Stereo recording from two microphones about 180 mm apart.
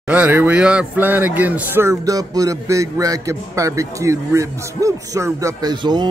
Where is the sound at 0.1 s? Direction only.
10° right (ahead or behind).